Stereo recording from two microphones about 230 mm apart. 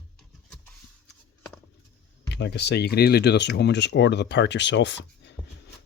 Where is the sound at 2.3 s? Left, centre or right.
Left.